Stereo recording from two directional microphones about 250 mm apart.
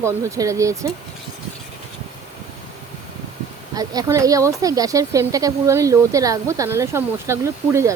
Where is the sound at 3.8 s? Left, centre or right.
Centre.